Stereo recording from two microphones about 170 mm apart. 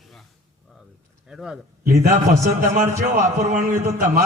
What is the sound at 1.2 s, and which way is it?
Speech, 5° right (ahead or behind).